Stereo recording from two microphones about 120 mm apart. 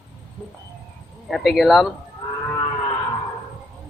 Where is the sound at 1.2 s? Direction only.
Centre (ahead or behind).